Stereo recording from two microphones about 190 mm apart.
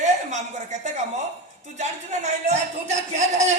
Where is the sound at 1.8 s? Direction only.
35° right (ahead or behind).